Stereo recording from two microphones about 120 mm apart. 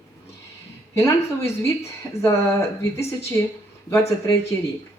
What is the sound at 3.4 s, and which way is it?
Speech, 25° left (ahead or behind).